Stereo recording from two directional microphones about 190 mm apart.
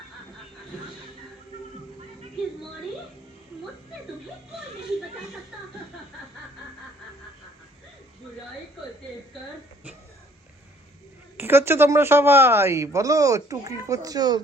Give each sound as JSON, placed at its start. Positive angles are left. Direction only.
{"t": 11.3, "sound": "speech", "side_deg": -10}